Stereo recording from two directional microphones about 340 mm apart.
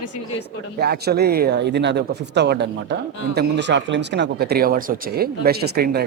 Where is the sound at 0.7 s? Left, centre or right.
Right.